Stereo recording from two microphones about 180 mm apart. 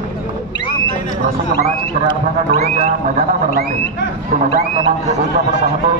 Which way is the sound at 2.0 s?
35° right (ahead or behind).